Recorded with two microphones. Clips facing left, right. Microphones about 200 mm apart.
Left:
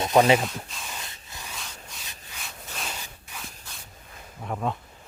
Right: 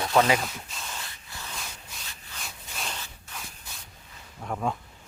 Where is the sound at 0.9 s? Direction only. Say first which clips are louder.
Left 1 dB; 20° left (ahead or behind).